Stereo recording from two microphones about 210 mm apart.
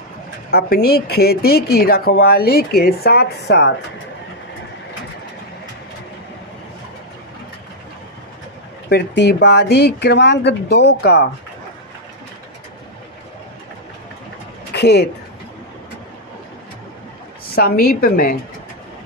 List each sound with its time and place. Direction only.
0.5 s speech: 45° left (ahead or behind)
8.8 s speech: 55° left (ahead or behind)
14.7 s speech: 55° left (ahead or behind)
17.6 s speech: 45° left (ahead or behind)